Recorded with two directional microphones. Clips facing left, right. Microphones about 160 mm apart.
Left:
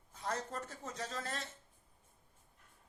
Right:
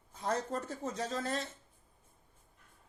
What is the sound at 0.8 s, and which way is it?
Speech, 30° right (ahead or behind).